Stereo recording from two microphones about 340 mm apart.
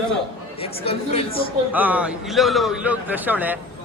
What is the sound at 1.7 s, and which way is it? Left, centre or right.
A man's voice, centre.